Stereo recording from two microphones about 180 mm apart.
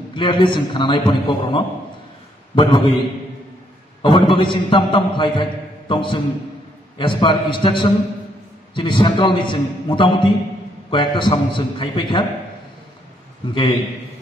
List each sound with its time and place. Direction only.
0.1 s a man's voice: 25° left (ahead or behind)
4.0 s a man's voice: 30° left (ahead or behind)
13.4 s a man's voice: 30° left (ahead or behind)